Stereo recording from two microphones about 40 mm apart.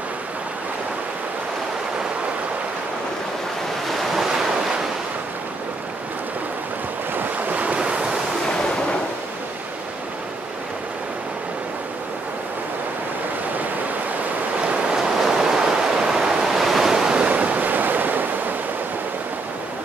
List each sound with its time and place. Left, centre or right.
4.0 s waves: centre
7.2 s waves: right
14.6 s waves: right
15.0 s waves: centre
16.9 s waves: right
17.3 s waves: right